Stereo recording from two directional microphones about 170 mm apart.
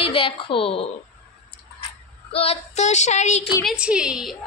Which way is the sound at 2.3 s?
35° left (ahead or behind).